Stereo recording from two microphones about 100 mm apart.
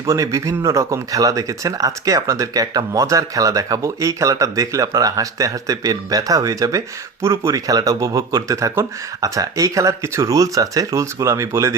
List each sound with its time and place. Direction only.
0.0 s speech: 30° right (ahead or behind)